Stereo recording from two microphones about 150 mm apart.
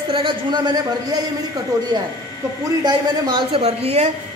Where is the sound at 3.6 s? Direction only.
45° right (ahead or behind).